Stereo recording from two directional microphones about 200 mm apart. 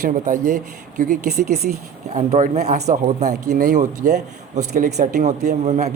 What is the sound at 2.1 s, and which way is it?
A man's voice, 35° right (ahead or behind).